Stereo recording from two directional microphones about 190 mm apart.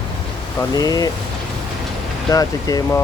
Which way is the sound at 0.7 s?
20° left (ahead or behind).